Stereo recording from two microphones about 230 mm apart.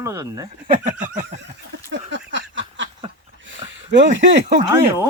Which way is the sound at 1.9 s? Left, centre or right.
Right.